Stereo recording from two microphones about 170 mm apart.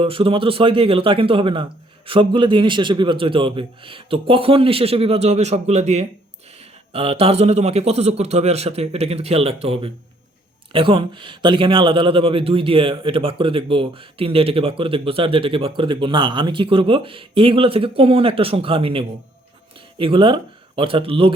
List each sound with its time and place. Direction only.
0.0 s speech: 30° right (ahead or behind)